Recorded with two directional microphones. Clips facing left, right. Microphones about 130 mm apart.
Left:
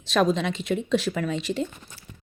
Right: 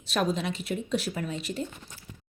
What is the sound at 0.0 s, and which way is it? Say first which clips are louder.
Speech: left 6 dB; 90° left.